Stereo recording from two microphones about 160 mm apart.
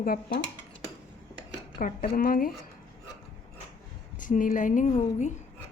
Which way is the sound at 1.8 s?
60° left (ahead or behind).